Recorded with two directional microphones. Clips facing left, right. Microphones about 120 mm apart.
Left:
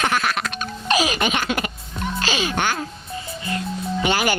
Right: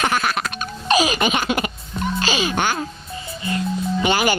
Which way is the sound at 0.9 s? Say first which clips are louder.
Right 3 dB; 20° right (ahead or behind).